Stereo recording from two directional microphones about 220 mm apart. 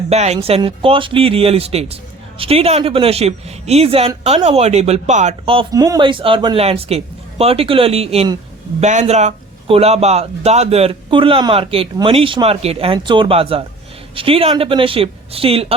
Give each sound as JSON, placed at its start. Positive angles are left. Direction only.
{"t": 0.1, "sound": "speech", "side_deg": -30}